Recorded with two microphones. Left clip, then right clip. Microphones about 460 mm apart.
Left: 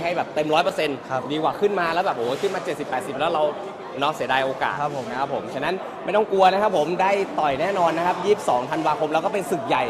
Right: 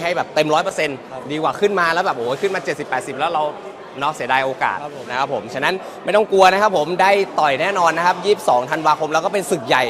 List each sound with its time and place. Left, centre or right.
0.0 s speech: centre